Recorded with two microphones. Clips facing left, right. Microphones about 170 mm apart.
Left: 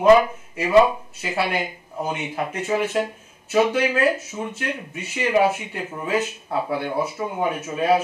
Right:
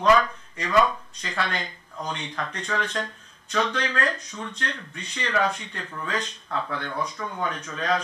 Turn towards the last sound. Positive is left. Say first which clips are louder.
# left 7 dB
turn(degrees=10)  # may be behind; listen again after turning